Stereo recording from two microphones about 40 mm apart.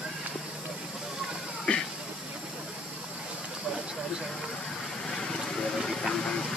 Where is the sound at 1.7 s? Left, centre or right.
Left.